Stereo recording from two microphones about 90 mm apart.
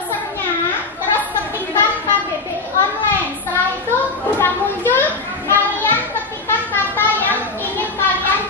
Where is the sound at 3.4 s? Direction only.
20° left (ahead or behind).